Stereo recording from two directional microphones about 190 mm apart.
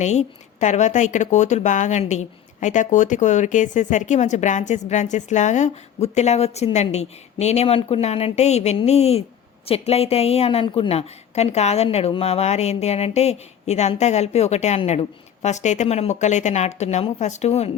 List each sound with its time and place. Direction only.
0.0 s a woman's voice: 35° left (ahead or behind)